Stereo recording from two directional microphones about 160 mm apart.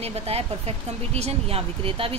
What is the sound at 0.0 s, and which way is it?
Speech, 40° right (ahead or behind).